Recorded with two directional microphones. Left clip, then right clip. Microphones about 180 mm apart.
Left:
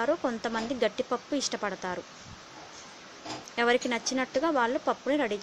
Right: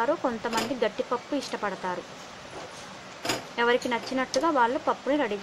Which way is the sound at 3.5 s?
25° left (ahead or behind).